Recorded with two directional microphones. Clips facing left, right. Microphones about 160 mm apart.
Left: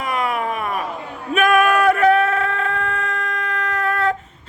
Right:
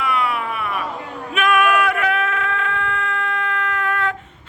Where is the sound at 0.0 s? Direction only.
40° left (ahead or behind).